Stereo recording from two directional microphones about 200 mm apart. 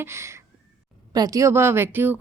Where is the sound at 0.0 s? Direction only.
15° right (ahead or behind).